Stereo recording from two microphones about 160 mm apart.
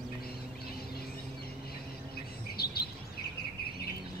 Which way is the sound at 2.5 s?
75° left (ahead or behind).